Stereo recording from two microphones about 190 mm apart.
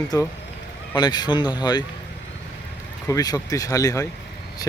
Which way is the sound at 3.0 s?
20° left (ahead or behind).